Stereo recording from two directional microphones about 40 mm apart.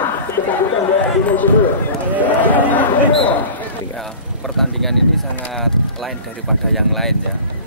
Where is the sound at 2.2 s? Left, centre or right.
Left.